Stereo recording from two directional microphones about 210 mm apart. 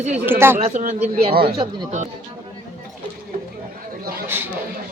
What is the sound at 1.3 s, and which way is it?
Speech, 45° right (ahead or behind).